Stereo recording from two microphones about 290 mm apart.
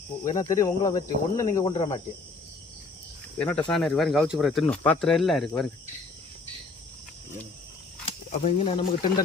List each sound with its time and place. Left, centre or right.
0.3 s cricket: centre
3.3 s speech: centre
8.0 s speech: left